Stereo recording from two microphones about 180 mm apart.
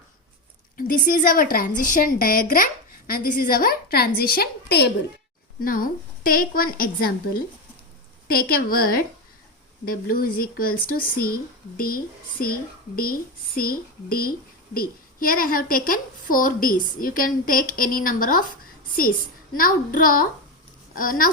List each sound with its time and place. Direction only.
0.8 s a woman's voice: 50° left (ahead or behind)
19.5 s a woman's voice: 50° left (ahead or behind)